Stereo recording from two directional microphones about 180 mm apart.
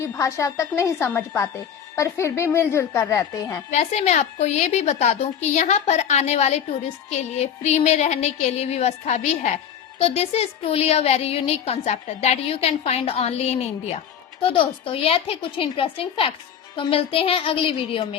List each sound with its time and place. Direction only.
0.0 s a woman's voice: 15° left (ahead or behind)
3.7 s speech: 40° left (ahead or behind)